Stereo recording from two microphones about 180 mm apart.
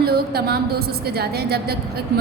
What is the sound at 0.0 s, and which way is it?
A woman's voice, 60° right (ahead or behind).